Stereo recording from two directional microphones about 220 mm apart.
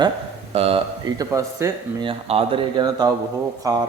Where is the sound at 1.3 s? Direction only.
15° right (ahead or behind).